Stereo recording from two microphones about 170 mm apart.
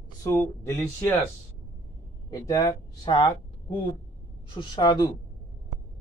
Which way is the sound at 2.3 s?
20° left (ahead or behind).